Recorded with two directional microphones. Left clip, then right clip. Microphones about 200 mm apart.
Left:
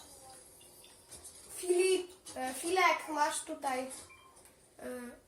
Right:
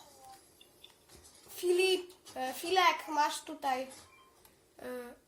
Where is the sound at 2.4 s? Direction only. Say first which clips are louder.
Right 1 dB; 55° right (ahead or behind).